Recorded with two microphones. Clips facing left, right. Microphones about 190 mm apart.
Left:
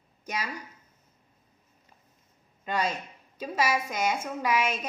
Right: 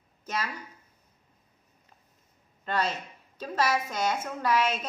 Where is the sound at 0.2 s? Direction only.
10° left (ahead or behind).